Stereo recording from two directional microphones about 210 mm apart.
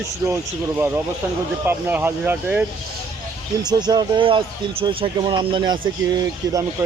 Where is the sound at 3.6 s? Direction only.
20° right (ahead or behind).